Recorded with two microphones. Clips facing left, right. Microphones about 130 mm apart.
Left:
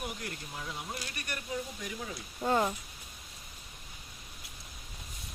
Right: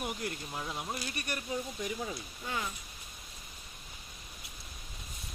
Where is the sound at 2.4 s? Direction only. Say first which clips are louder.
Left 10 dB; 50° left (ahead or behind).